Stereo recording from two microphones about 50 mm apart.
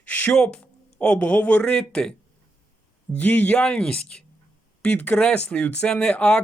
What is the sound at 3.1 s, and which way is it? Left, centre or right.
Speech, left.